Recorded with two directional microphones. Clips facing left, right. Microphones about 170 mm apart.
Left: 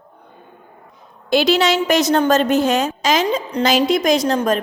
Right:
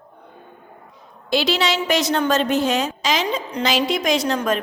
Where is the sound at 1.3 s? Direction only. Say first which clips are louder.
Left 5 dB; 50° left (ahead or behind).